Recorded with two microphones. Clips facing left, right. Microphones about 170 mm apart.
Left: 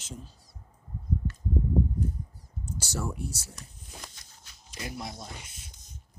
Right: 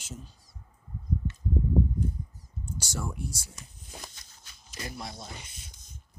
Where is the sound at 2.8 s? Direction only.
5° left (ahead or behind).